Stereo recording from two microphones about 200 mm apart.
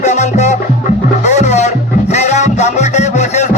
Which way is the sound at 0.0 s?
35° left (ahead or behind).